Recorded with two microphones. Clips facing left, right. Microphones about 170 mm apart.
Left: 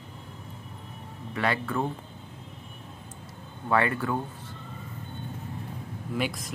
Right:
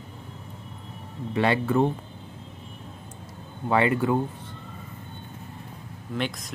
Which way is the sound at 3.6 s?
20° right (ahead or behind).